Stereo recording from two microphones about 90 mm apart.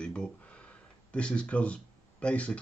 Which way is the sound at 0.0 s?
10° left (ahead or behind).